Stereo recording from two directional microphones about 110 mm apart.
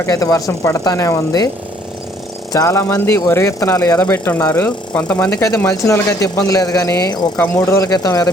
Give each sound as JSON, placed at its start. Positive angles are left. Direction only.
{"t": 0.0, "sound": "speech", "side_deg": 30}
{"t": 2.5, "sound": "speech", "side_deg": 30}
{"t": 4.0, "sound": "speech", "side_deg": 20}
{"t": 5.3, "sound": "speech", "side_deg": 30}
{"t": 7.4, "sound": "speech", "side_deg": 20}